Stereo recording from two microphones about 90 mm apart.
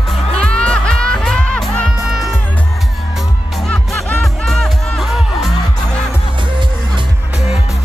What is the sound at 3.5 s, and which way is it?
Music, 5° left (ahead or behind).